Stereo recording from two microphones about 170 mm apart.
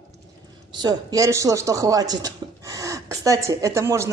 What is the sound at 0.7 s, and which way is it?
Speech, 20° right (ahead or behind).